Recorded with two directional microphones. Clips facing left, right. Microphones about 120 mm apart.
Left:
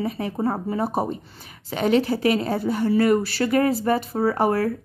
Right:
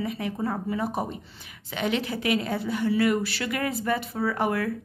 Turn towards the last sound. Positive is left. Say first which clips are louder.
# left 5 dB
turn(degrees=35)  # may be behind; listen again after turning